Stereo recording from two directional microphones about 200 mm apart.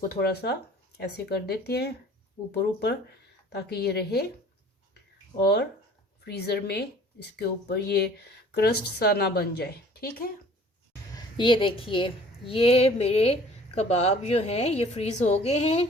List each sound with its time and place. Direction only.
0.1 s speech: 50° left (ahead or behind)
3.7 s speech: 55° left (ahead or behind)
5.4 s speech: 55° left (ahead or behind)
11.1 s a woman's voice: 25° left (ahead or behind)